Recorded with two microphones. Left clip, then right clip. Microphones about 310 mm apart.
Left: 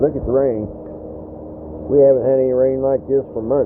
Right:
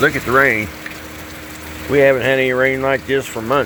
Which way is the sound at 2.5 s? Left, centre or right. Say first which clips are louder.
Even; right.